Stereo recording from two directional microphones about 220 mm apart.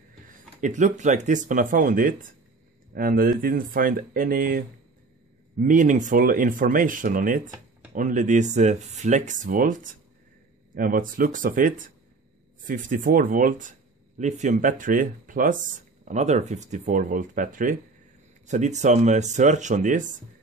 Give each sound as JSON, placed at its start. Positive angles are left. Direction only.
{"t": 0.6, "sound": "speech", "side_deg": -35}